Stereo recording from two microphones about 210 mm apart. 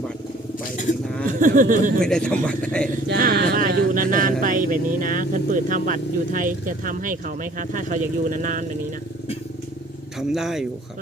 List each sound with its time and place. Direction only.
1.3 s speech: 40° right (ahead or behind)
2.0 s speech: 5° left (ahead or behind)
3.1 s speech: 45° right (ahead or behind)
10.2 s speech: centre (ahead or behind)